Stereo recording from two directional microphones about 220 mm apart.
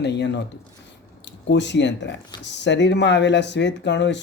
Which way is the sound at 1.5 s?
55° left (ahead or behind).